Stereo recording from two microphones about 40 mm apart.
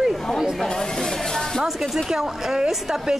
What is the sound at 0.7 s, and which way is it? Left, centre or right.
Speech, centre.